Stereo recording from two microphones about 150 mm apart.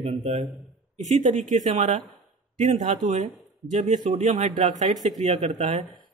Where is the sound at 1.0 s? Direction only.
55° right (ahead or behind).